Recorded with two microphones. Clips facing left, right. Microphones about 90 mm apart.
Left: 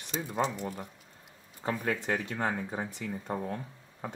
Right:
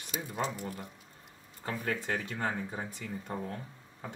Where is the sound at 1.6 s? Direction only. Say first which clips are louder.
Left 3 dB; 25° left (ahead or behind).